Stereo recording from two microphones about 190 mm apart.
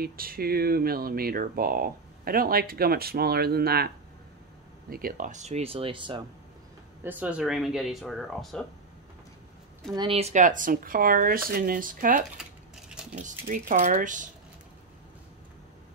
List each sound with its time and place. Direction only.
0.0 s speech: 50° right (ahead or behind); by 6.2 s 25° right (ahead or behind)
7.0 s speech: 10° right (ahead or behind)
9.9 s speech: 30° right (ahead or behind); by 12.3 s 45° right (ahead or behind)
12.4 s coin: 5° right (ahead or behind)
13.5 s speech: 45° right (ahead or behind)